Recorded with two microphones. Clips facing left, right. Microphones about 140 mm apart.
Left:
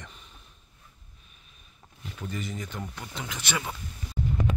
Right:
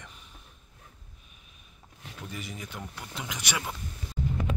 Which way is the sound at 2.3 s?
10° right (ahead or behind).